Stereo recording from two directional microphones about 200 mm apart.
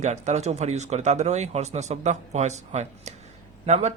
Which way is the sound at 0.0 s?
35° right (ahead or behind).